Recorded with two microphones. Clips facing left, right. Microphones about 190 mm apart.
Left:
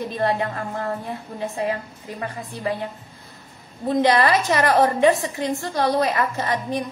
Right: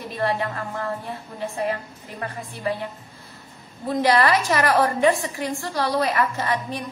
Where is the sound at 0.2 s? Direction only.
20° left (ahead or behind).